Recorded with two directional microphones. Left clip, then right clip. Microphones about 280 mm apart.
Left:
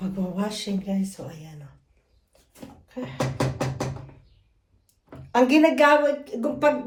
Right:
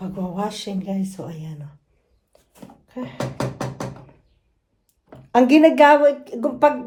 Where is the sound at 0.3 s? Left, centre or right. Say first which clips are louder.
Right 5 dB; right.